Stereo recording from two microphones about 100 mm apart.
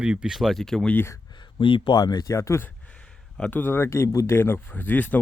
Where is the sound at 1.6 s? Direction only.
60° left (ahead or behind).